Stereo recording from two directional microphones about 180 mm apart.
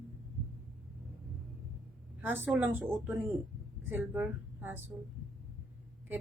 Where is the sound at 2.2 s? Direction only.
10° right (ahead or behind).